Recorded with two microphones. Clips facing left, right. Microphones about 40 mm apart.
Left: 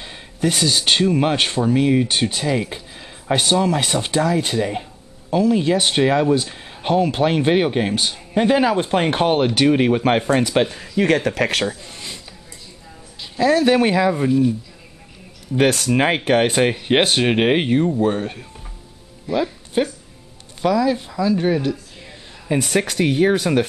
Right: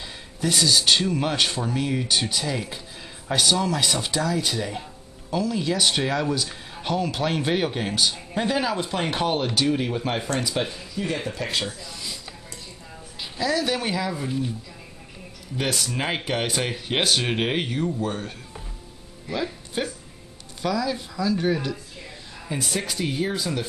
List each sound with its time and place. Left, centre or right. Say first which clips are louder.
0.0 s speech: left 6 dB; left
11.6 s speech: left 7 dB; left
13.4 s speech: left 9 dB; left
15.5 s speech: left 10 dB; left
19.3 s speech: left 8 dB; centre
22.6 s speech: left 8 dB; left